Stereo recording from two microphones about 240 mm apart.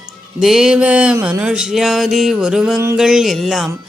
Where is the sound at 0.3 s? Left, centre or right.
Centre.